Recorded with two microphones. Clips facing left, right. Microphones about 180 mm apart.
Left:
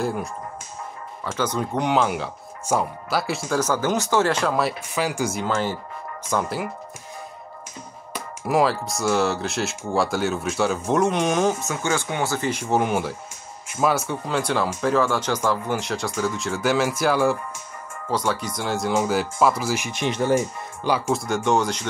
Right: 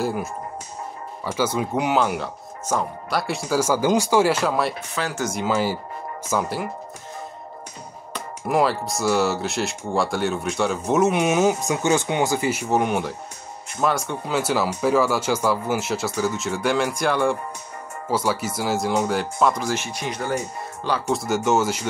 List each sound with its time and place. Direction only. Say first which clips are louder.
0.0 s speech: right 1 dB; 5° right (ahead or behind)
4.9 s speech: left 2 dB; 10° left (ahead or behind)
5.4 s speech: right 2 dB; 10° right (ahead or behind)
8.1 s speech: even; centre (ahead or behind)
19.9 s speech: left 5 dB; 25° left (ahead or behind)
21.1 s speech: right 3 dB; centre (ahead or behind)